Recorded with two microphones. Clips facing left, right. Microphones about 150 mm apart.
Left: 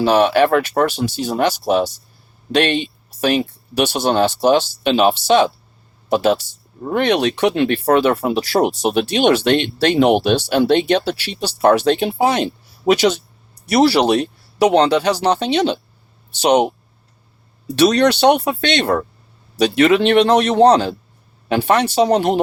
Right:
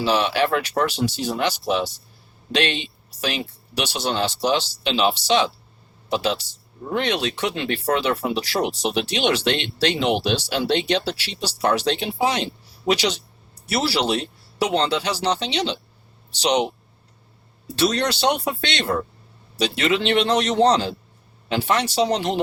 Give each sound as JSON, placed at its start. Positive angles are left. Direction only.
{"t": 0.0, "sound": "speech", "side_deg": 50}
{"t": 13.7, "sound": "speech", "side_deg": 65}
{"t": 17.7, "sound": "speech", "side_deg": 65}